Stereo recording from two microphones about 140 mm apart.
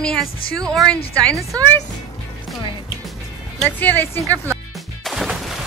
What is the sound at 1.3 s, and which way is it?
Speech, 25° right (ahead or behind).